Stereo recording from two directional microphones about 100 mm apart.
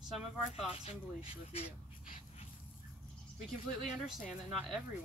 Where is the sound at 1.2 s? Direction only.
75° left (ahead or behind).